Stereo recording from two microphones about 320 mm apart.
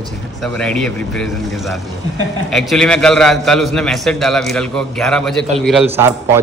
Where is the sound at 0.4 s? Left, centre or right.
Centre.